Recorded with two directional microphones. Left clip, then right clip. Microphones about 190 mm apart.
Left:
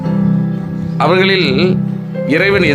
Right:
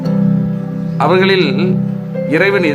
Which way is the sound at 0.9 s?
15° left (ahead or behind).